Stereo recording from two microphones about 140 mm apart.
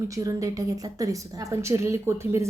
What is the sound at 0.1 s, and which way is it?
Speech, 25° right (ahead or behind).